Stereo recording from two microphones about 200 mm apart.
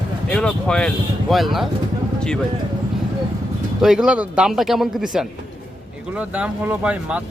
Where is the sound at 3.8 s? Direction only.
5° right (ahead or behind).